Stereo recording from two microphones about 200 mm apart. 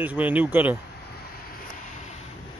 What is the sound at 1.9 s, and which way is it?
Vehicle, 35° left (ahead or behind).